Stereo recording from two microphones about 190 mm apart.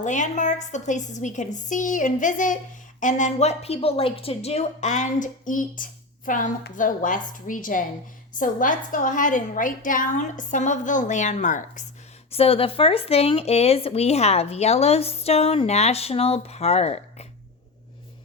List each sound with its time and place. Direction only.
0.0 s a woman's voice: 40° left (ahead or behind)
12.3 s speech: 30° left (ahead or behind)